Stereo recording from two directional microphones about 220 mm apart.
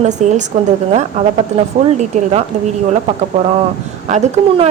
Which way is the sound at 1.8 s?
30° right (ahead or behind).